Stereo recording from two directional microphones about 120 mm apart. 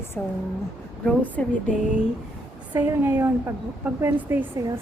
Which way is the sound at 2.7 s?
15° right (ahead or behind).